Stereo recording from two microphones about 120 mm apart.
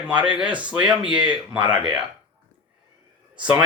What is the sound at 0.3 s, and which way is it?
Speech, 10° right (ahead or behind).